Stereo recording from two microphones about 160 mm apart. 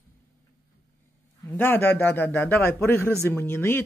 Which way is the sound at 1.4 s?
15° left (ahead or behind).